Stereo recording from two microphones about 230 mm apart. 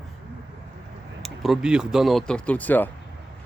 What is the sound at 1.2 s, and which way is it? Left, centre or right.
Speech, centre.